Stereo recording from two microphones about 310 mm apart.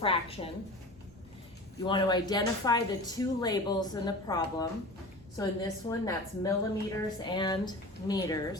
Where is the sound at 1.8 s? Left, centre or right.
Centre.